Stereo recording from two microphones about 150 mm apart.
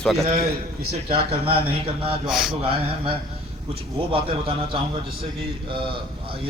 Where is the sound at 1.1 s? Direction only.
40° right (ahead or behind).